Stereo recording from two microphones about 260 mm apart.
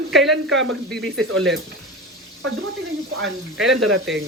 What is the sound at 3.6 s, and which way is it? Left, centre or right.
Speech, right.